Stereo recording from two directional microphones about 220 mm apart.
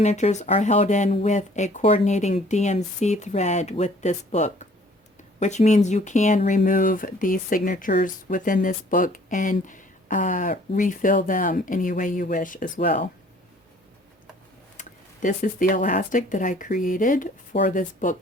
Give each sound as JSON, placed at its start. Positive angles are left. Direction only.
{"t": 0.0, "sound": "speech", "side_deg": 30}
{"t": 14.8, "sound": "speech", "side_deg": 35}